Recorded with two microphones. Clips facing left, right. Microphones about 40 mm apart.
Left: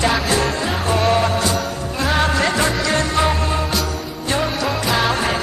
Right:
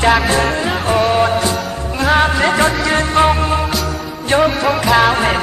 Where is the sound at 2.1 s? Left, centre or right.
Centre.